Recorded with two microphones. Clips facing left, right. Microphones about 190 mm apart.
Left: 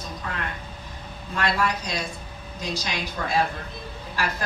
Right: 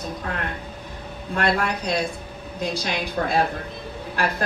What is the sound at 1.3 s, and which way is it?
A woman's voice, 55° right (ahead or behind).